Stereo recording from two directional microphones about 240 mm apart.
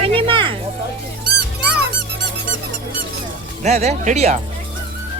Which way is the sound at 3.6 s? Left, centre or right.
Right.